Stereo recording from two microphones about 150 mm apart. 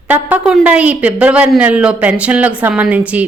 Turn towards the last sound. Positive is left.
turn(degrees=-10)  # may be behind; listen again after turning